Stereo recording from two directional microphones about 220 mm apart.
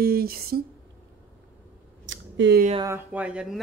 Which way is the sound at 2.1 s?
50° right (ahead or behind).